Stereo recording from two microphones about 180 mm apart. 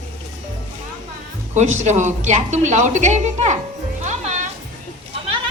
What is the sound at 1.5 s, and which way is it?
A woman's voice, 40° right (ahead or behind).